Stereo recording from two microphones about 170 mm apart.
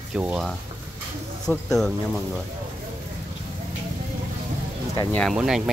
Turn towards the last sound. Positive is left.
turn(degrees=-5)  # may be behind; listen again after turning